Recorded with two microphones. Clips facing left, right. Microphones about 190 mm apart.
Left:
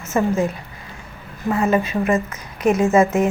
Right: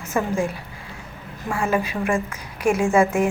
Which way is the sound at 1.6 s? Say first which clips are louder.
Left 3 dB; 10° right (ahead or behind).